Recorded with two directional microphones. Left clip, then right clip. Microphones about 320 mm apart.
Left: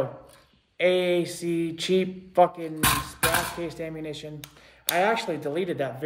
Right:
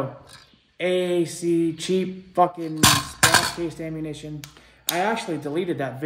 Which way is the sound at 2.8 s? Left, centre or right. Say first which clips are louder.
Right 6 dB; right.